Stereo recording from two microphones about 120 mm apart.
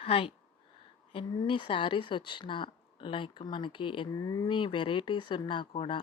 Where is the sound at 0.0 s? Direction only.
50° left (ahead or behind).